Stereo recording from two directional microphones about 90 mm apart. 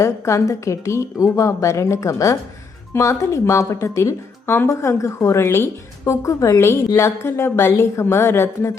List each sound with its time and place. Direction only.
0.0 s speech: 35° left (ahead or behind)